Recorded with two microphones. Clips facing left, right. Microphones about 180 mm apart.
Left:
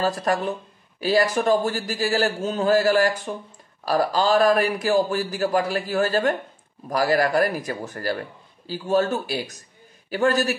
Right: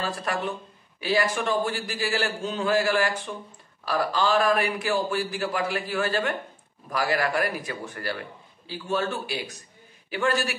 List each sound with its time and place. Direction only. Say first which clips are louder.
0.0 s a man's voice: left 6 dB; 40° left (ahead or behind)